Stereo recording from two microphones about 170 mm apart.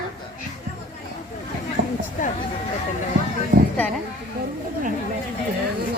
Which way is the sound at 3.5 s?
60° right (ahead or behind).